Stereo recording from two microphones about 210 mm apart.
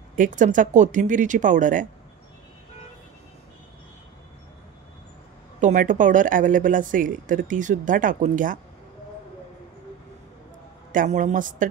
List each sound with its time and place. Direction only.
0.1 s speech: 40° right (ahead or behind)
5.6 s speech: 35° right (ahead or behind)
10.9 s speech: 40° right (ahead or behind)